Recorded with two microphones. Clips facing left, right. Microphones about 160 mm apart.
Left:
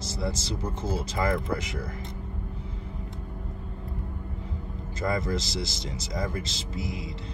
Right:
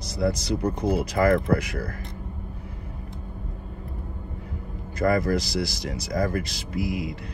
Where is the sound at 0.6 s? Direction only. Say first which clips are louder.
Right 7 dB; 65° right (ahead or behind).